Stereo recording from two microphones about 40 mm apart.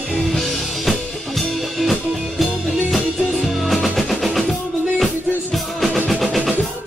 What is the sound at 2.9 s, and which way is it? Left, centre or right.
Music, centre.